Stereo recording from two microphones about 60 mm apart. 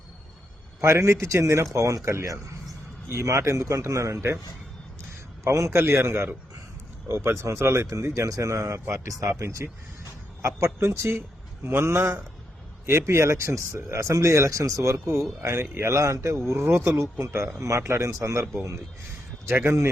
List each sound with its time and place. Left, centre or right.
0.8 s speech: right
5.5 s speech: right
7.9 s speech: right
11.6 s a man's voice: right
15.4 s speech: right
16.5 s speech: right